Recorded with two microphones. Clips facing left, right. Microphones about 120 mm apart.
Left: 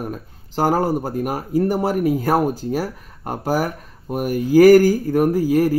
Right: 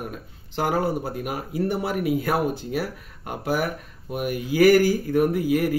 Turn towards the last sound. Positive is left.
turn(degrees=35)  # may be behind; listen again after turning